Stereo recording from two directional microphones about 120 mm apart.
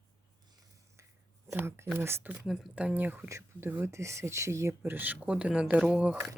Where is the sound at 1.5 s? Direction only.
20° right (ahead or behind).